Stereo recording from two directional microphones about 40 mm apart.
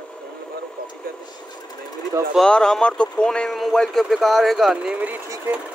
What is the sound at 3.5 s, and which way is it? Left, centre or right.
Speech, centre.